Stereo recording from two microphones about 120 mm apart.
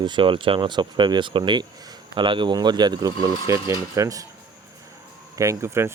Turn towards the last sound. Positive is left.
turn(degrees=-20)  # may be behind; listen again after turning